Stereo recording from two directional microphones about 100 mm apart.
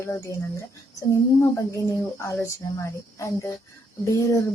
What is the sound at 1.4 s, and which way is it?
Speech, 30° left (ahead or behind).